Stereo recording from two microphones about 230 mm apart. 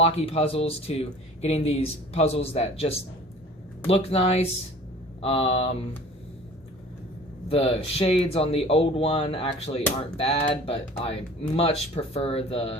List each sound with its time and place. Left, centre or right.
0.0 s speech: left
7.4 s speech: left